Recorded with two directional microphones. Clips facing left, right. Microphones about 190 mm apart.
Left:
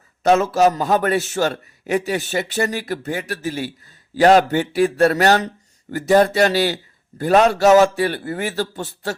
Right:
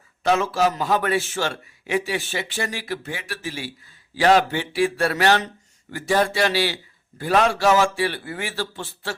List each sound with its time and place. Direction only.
0.2 s a man's voice: 45° left (ahead or behind)